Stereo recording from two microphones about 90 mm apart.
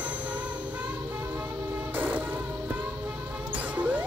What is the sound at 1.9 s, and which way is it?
Music, 20° right (ahead or behind).